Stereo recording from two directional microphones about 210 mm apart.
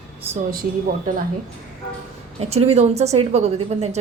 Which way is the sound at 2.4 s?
30° right (ahead or behind).